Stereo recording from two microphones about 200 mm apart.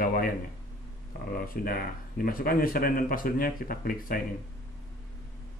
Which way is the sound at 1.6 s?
50° left (ahead or behind).